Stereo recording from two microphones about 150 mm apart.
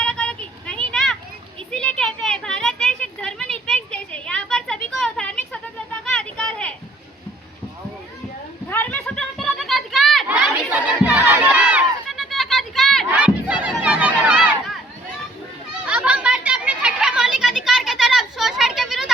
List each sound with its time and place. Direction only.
0.0 s a sound: 5° left (ahead or behind)
8.7 s children playing: 10° left (ahead or behind)
10.2 s crowd: 10° right (ahead or behind)
15.9 s children playing: 10° right (ahead or behind)